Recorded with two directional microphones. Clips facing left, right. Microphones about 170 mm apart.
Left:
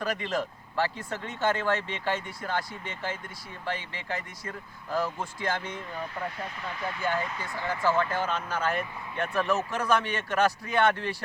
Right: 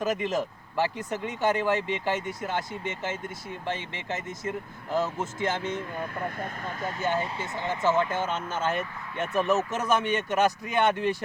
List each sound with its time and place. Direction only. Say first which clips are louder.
0.0 s speech: right 3 dB; 20° right (ahead or behind)
6.0 s speech: right 2 dB; 50° right (ahead or behind)
7.0 s speech: right 2 dB; 25° right (ahead or behind)